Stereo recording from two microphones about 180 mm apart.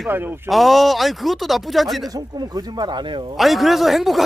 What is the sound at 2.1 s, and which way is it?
Speech, 20° right (ahead or behind).